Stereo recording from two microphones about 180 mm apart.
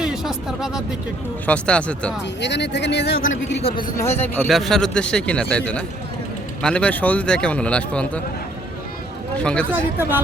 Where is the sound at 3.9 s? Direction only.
15° left (ahead or behind).